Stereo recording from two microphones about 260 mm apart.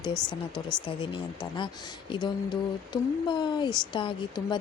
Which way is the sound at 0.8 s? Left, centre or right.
Centre.